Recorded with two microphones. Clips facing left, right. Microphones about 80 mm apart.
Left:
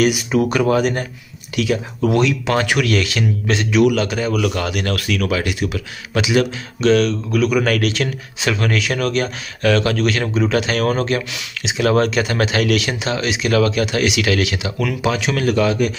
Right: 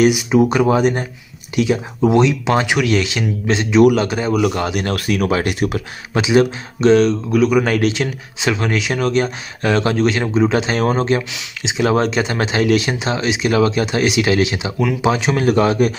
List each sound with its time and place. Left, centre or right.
0.0 s speech: centre; by 5.8 s right
6.1 s speech: right